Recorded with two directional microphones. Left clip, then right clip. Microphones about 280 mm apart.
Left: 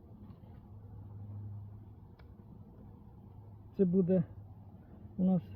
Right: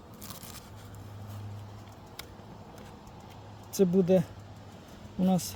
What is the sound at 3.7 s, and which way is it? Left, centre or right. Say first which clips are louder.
Speech: right 6 dB; centre.